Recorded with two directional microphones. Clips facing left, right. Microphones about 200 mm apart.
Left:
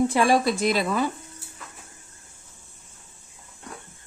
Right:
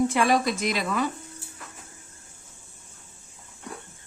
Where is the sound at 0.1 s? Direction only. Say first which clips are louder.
Left 2 dB; 30° left (ahead or behind).